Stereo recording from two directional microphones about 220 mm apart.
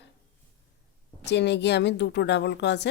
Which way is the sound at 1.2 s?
50° left (ahead or behind).